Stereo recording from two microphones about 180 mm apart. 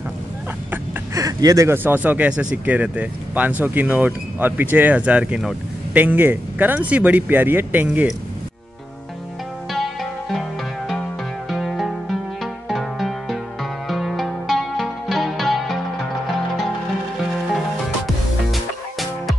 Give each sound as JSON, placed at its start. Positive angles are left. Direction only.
{"t": 0.7, "sound": "speech", "side_deg": -20}
{"t": 10.9, "sound": "music", "side_deg": 0}
{"t": 18.0, "sound": "music", "side_deg": 0}